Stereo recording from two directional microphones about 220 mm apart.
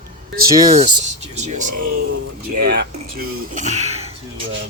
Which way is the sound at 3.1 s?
35° right (ahead or behind).